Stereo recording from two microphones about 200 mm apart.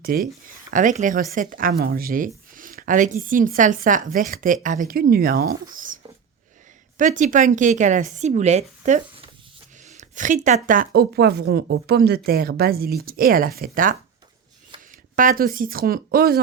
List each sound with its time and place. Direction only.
0.0 s a woman's voice: 45° right (ahead or behind)
15.1 s a woman's voice: 45° right (ahead or behind)